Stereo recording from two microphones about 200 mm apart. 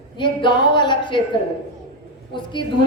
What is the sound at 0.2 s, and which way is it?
A man's voice, 25° left (ahead or behind).